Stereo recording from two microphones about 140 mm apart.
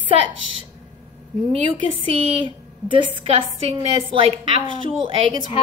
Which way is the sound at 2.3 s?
35° right (ahead or behind).